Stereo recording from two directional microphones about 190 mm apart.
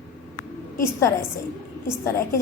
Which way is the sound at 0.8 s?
15° left (ahead or behind).